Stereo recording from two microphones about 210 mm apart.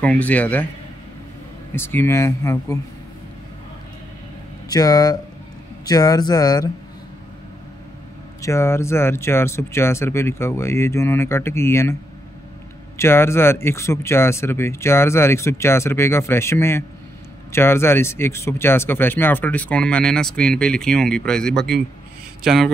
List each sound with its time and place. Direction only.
0.0 s speech: 5° left (ahead or behind)
1.8 s speech: 10° left (ahead or behind)
4.6 s speech: 15° left (ahead or behind)
8.4 s speech: 15° left (ahead or behind)